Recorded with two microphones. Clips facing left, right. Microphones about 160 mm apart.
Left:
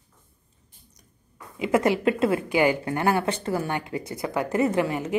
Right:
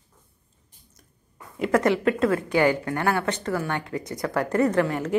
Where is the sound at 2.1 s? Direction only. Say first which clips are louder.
Even; 25° left (ahead or behind).